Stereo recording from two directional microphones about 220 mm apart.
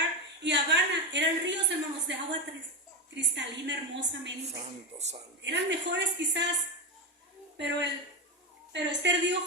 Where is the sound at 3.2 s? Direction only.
55° right (ahead or behind).